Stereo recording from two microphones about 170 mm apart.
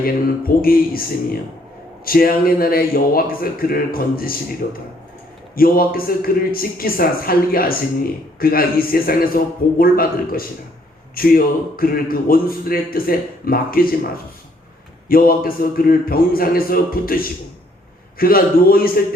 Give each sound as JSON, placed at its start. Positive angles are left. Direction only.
{"t": 0.0, "sound": "a man's voice", "side_deg": 60}
{"t": 2.0, "sound": "a man's voice", "side_deg": 60}
{"t": 5.5, "sound": "a man's voice", "side_deg": 60}
{"t": 15.1, "sound": "a man's voice", "side_deg": 60}